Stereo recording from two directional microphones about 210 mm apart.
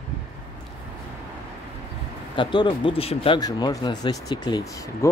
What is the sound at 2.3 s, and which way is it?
Speech, 20° left (ahead or behind).